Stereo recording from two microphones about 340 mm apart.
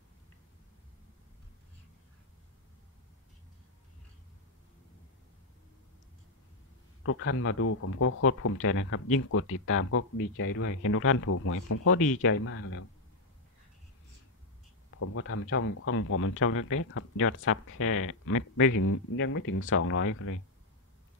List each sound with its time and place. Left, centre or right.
7.0 s speech: left
15.0 s speech: left